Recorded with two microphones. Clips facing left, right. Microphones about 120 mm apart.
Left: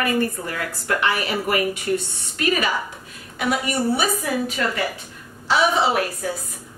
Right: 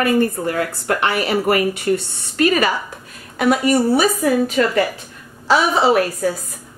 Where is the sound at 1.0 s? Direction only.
60° right (ahead or behind).